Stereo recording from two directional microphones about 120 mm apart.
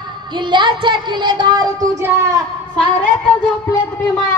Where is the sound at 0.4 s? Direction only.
40° right (ahead or behind).